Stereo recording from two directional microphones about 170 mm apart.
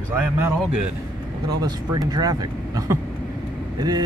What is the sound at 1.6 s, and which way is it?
Speech, 25° right (ahead or behind).